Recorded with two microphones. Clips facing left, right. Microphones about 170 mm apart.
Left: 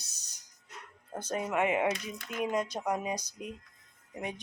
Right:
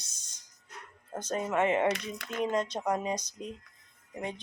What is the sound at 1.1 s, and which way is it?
Speech, 10° left (ahead or behind).